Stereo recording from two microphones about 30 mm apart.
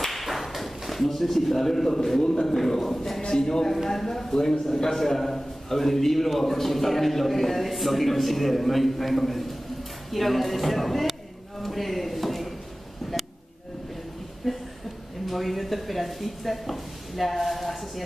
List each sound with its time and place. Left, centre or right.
0.0 s whip: centre
0.6 s a man's voice: centre
3.7 s a man's voice: centre
11.6 s a sound: centre
14.4 s a sound: centre
15.2 s speech: centre